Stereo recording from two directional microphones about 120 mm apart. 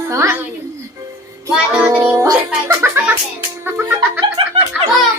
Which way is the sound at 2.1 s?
20° right (ahead or behind).